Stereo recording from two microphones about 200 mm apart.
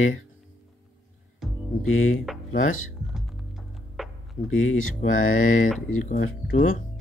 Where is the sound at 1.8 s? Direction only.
90° left.